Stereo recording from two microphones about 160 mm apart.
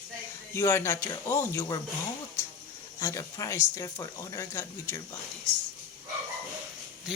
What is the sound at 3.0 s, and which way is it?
Speech, 20° left (ahead or behind).